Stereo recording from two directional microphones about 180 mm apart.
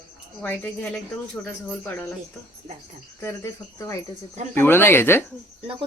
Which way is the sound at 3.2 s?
15° left (ahead or behind).